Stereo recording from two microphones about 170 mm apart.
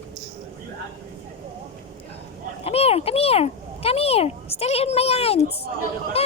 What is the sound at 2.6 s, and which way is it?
A child's voice, 35° left (ahead or behind).